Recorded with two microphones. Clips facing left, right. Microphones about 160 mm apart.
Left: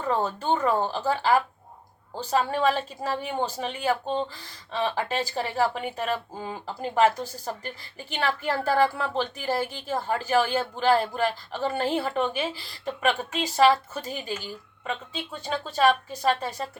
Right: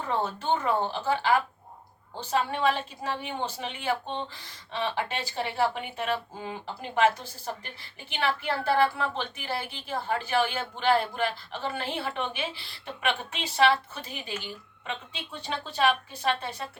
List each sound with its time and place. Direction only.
0.2 s a woman's voice: 40° left (ahead or behind)
2.3 s a woman's voice: 40° left (ahead or behind)